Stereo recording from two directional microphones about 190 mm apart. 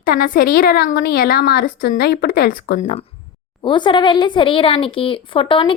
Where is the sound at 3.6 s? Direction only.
25° left (ahead or behind).